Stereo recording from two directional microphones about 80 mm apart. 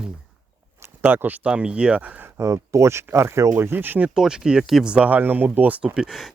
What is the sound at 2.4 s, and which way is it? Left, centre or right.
Speech, right.